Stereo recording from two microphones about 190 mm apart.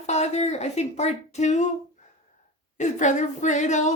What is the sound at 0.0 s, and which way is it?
Speech, 35° left (ahead or behind).